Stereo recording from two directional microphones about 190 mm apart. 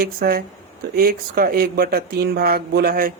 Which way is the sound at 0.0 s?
50° right (ahead or behind).